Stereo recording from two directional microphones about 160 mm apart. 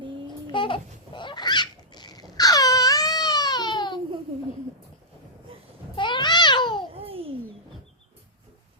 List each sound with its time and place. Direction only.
0.5 s a sound: 30° left (ahead or behind)
6.0 s babbling: 30° left (ahead or behind)
6.9 s babbling: 35° right (ahead or behind)